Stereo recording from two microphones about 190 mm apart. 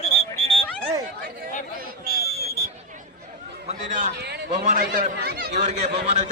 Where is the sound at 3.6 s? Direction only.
45° right (ahead or behind).